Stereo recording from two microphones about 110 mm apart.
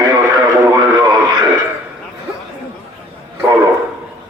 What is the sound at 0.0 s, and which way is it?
Radio, 35° right (ahead or behind).